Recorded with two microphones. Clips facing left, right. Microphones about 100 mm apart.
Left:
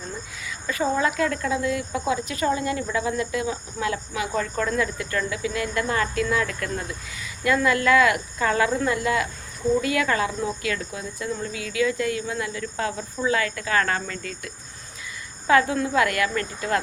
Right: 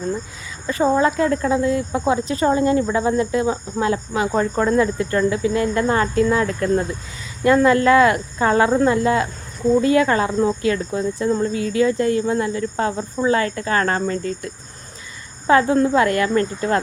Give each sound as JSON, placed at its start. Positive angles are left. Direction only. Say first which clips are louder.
{"t": 0.4, "sound": "speech", "louder": "right 6 dB", "side_deg": -30}